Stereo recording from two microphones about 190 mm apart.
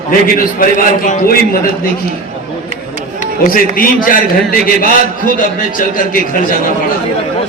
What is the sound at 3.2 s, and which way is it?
A man's voice, 50° left (ahead or behind).